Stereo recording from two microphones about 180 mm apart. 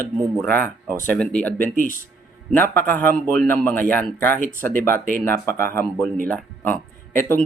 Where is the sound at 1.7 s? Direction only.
50° left (ahead or behind).